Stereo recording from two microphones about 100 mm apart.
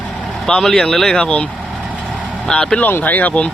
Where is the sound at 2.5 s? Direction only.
5° left (ahead or behind).